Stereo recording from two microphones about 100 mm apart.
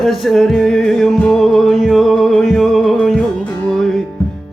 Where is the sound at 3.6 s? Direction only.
5° left (ahead or behind).